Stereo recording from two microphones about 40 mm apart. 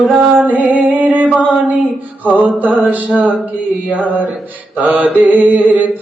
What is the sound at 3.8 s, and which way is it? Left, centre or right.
Mantra, left.